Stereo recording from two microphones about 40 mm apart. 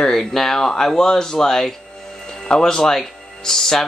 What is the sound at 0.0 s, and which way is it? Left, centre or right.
Speech, centre.